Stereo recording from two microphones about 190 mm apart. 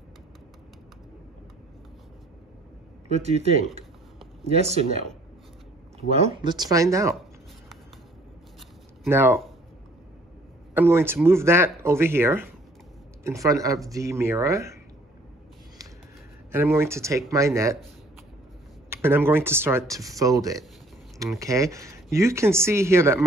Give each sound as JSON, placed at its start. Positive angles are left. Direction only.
{"t": 3.1, "sound": "speech", "side_deg": -35}
{"t": 9.1, "sound": "speech", "side_deg": -10}
{"t": 10.7, "sound": "speech", "side_deg": -10}
{"t": 16.5, "sound": "speech", "side_deg": -15}
{"t": 18.9, "sound": "speech", "side_deg": -10}